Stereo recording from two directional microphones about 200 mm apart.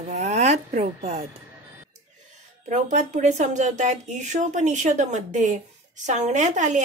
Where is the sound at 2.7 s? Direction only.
35° right (ahead or behind).